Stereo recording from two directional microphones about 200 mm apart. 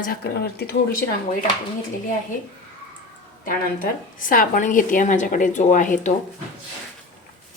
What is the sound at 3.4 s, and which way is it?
A woman's voice, 45° left (ahead or behind).